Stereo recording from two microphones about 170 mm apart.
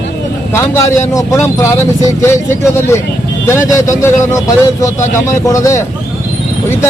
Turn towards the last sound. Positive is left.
turn(degrees=20)  # may be behind; listen again after turning